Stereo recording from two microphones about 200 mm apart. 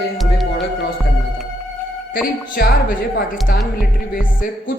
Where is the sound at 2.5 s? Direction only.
45° left (ahead or behind).